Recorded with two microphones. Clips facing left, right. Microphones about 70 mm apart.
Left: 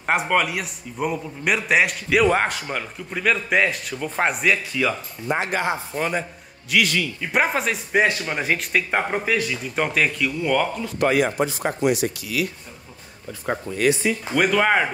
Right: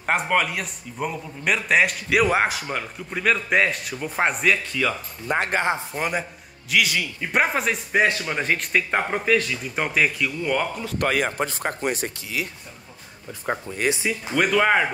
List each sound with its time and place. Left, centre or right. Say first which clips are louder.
0.0 s a man's voice: left 1 dB; centre
5.5 s speech: right 1 dB; right
5.9 s a man's voice: left 1 dB; centre
11.0 s speech: left 4 dB; right
13.7 s speech: left 3 dB; right
14.0 s a man's voice: left 2 dB; centre